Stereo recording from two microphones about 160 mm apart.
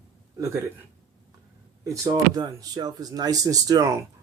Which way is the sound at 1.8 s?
20° right (ahead or behind).